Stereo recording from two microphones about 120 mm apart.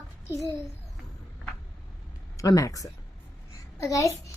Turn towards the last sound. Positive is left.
turn(degrees=25)  # may be behind; listen again after turning